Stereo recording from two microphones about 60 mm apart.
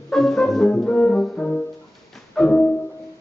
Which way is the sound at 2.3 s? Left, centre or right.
Centre.